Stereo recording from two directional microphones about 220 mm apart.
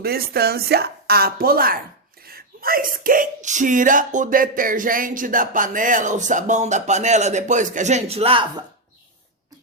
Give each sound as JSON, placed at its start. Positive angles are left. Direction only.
{"t": 0.0, "sound": "speech", "side_deg": -45}